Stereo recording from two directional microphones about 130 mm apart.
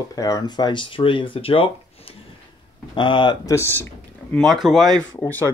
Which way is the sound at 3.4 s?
20° left (ahead or behind).